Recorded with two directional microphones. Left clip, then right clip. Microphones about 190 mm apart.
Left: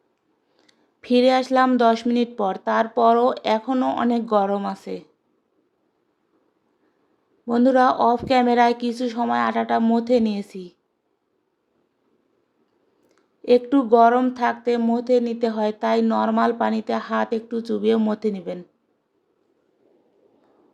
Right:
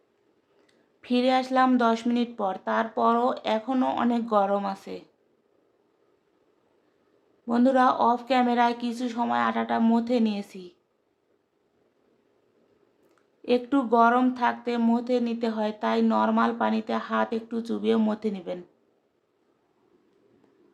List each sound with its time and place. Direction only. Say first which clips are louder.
0.7 s speech: left 8 dB; 30° left (ahead or behind)
7.4 s speech: left 4 dB; 20° left (ahead or behind)
13.4 s speech: left 7 dB; 20° left (ahead or behind)